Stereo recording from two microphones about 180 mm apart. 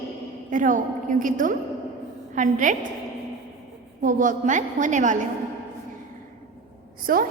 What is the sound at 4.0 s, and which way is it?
A woman's voice, 45° right (ahead or behind).